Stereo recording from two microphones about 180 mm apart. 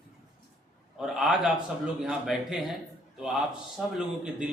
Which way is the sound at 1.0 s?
Centre (ahead or behind).